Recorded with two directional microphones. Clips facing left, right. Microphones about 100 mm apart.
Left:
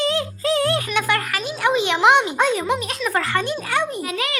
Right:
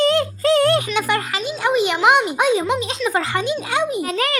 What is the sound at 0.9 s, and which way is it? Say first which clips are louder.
A woman's voice: right 1 dB; 15° right (ahead or behind).